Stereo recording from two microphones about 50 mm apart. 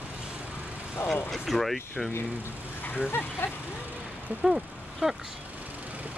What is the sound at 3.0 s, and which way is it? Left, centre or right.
Speech, left.